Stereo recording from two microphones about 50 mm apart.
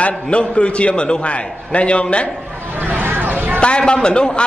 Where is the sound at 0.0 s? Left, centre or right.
Left.